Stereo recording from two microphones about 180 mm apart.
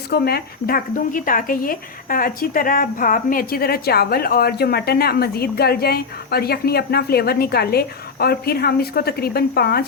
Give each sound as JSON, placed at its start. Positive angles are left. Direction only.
{"t": 0.1, "sound": "speech", "side_deg": 60}